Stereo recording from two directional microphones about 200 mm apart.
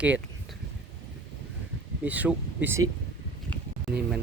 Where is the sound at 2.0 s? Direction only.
5° right (ahead or behind).